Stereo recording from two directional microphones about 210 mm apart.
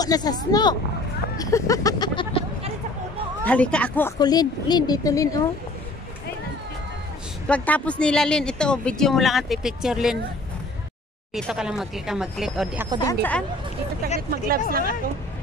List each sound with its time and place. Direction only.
0.0 s a woman's voice: 20° left (ahead or behind)
1.4 s a sound: 15° left (ahead or behind)
3.4 s speech: 5° left (ahead or behind)
4.2 s a woman's voice: 20° left (ahead or behind)
7.4 s speech: 5° left (ahead or behind)
11.3 s speech: centre (ahead or behind)
13.0 s speech: 10° left (ahead or behind)
14.3 s speech: 45° right (ahead or behind)